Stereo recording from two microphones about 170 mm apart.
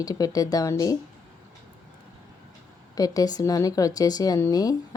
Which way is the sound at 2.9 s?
20° left (ahead or behind).